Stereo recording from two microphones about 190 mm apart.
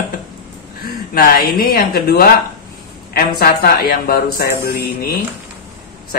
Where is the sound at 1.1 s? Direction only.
50° left (ahead or behind).